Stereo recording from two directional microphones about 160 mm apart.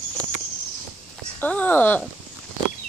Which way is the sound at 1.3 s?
10° left (ahead or behind).